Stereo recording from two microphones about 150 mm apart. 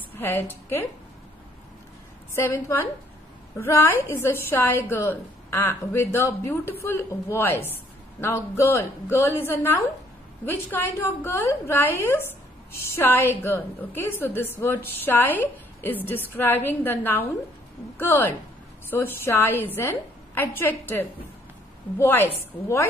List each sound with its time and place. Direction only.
0.1 s a woman's voice: 15° left (ahead or behind)
2.3 s a woman's voice: 15° left (ahead or behind)